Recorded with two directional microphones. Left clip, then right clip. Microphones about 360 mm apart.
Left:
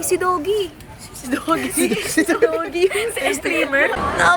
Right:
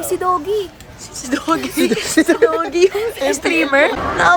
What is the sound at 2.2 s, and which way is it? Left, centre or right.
Speech, right.